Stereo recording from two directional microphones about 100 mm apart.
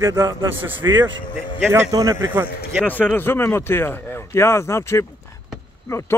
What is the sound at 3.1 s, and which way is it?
A man's voice, 25° left (ahead or behind).